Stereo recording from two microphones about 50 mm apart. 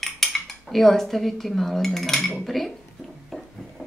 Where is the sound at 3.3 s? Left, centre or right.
Centre.